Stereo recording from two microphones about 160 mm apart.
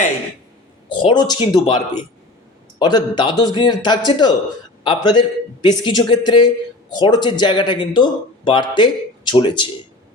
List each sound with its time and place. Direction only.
0.9 s a man's voice: 30° left (ahead or behind)